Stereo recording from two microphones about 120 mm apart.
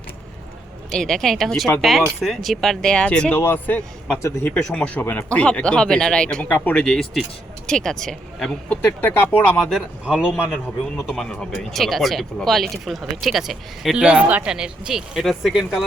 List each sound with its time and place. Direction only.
0.9 s speech: 5° left (ahead or behind); by 4.5 s 25° left (ahead or behind)
4.5 s speech: 10° left (ahead or behind)
6.8 s speech: 5° left (ahead or behind)
10.1 s a man's voice: 5° right (ahead or behind)
11.0 s speech: 5° left (ahead or behind)